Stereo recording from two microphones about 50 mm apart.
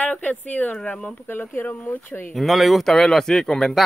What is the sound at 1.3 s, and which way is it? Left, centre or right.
Speech, left.